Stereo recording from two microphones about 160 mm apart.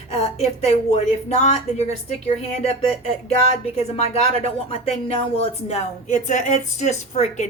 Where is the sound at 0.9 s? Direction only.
45° left (ahead or behind).